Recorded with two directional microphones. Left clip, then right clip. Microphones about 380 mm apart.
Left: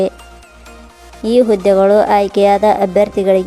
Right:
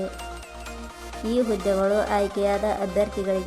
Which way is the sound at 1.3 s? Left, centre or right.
Centre.